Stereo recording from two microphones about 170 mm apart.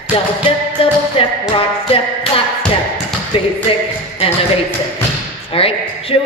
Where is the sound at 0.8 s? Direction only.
30° left (ahead or behind).